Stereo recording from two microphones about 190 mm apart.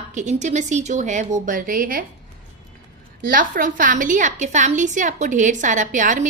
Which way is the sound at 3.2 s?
45° right (ahead or behind).